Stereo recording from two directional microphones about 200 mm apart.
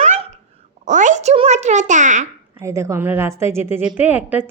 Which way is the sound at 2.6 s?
15° right (ahead or behind).